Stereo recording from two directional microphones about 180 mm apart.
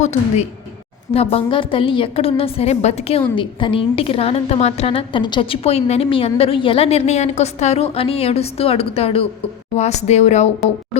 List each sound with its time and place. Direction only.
0.0 s a woman's voice: 40° left (ahead or behind)